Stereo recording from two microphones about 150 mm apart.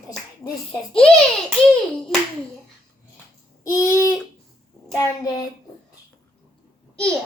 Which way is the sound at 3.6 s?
20° left (ahead or behind).